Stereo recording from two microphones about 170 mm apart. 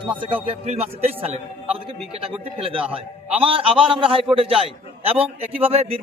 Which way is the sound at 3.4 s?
30° right (ahead or behind).